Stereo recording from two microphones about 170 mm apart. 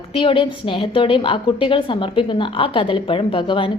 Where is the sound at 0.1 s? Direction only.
30° left (ahead or behind).